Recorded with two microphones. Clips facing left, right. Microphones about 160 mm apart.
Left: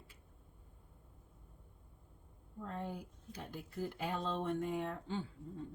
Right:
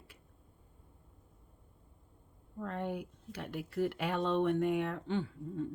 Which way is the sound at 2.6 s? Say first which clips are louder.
Right 6 dB; 70° right (ahead or behind).